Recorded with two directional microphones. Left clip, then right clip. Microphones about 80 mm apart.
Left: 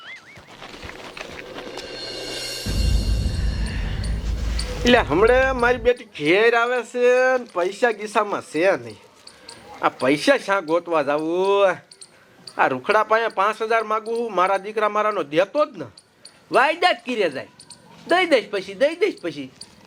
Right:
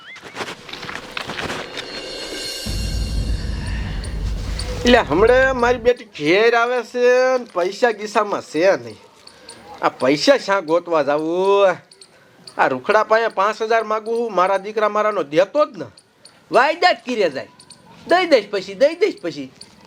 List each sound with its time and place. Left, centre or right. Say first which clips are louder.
3.6 s speech: right 1 dB; right